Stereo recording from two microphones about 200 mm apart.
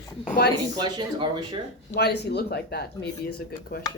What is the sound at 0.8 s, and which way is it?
Speech, 25° right (ahead or behind).